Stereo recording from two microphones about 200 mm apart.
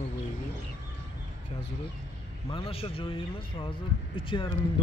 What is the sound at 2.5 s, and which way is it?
Speech, 30° left (ahead or behind).